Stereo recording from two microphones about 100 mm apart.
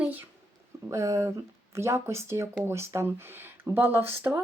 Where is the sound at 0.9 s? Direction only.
30° right (ahead or behind).